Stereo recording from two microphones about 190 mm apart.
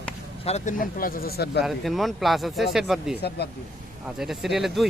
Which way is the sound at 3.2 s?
60° left (ahead or behind).